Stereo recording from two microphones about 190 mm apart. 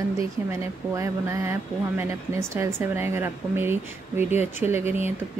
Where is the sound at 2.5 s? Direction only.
15° right (ahead or behind).